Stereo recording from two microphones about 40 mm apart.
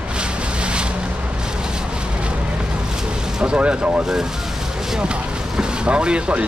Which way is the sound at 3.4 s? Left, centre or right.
Right.